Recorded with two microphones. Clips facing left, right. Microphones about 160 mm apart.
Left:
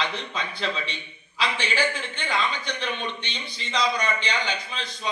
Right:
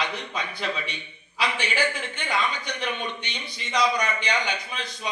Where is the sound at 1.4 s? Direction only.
15° right (ahead or behind).